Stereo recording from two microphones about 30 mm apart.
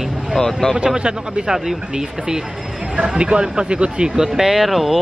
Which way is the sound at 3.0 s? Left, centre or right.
Right.